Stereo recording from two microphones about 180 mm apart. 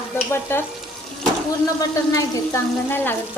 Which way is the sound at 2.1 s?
20° left (ahead or behind).